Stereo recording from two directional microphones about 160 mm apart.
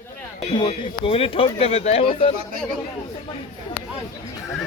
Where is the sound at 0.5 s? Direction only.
30° left (ahead or behind).